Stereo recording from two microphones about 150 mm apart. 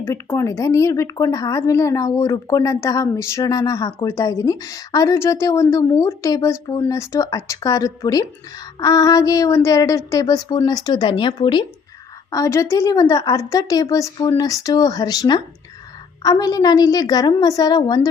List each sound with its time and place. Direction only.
0.0 s speech: 20° left (ahead or behind)
12.3 s speech: 20° left (ahead or behind)